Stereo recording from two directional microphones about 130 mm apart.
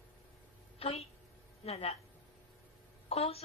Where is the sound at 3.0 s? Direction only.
50° left (ahead or behind).